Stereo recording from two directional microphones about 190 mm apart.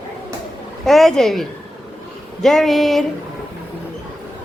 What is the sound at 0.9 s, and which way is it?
A woman's voice, centre (ahead or behind).